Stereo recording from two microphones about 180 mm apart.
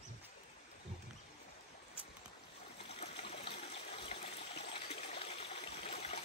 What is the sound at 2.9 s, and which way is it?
Water, 35° left (ahead or behind).